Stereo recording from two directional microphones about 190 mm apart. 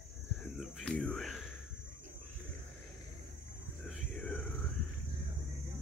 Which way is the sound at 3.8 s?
5° left (ahead or behind).